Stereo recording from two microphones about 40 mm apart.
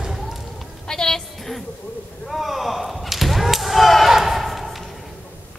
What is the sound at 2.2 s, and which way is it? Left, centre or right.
Whip, centre.